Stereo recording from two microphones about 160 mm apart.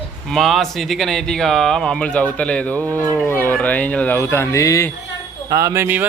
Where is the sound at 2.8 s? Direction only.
20° right (ahead or behind).